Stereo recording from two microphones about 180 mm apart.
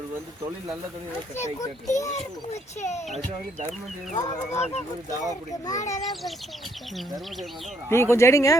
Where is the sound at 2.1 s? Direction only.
40° left (ahead or behind).